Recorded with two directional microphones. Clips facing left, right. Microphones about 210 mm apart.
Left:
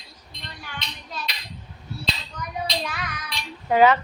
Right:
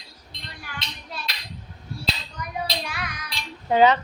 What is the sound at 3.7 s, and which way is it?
Female singing, 20° right (ahead or behind).